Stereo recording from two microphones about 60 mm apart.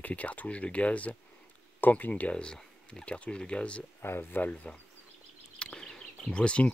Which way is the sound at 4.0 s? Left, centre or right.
Left.